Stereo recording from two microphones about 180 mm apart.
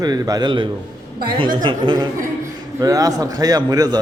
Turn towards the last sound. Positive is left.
turn(degrees=-20)  # may be behind; listen again after turning